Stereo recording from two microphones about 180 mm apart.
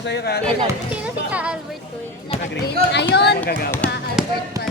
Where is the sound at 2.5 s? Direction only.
70° left (ahead or behind).